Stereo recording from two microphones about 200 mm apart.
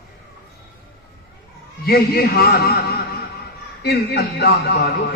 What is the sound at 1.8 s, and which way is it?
A man's voice, 50° left (ahead or behind).